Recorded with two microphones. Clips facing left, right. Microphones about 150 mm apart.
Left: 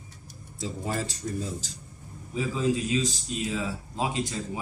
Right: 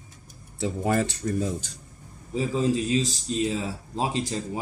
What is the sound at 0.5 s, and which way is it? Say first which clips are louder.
Speech: right 7 dB; 65° right (ahead or behind).